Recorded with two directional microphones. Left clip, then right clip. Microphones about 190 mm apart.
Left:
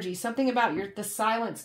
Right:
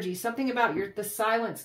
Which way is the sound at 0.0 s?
35° left (ahead or behind).